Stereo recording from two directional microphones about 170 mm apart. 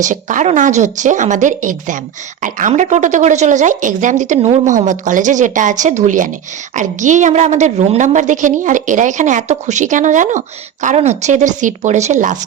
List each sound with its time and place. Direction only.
0.0 s a woman's voice: 50° right (ahead or behind)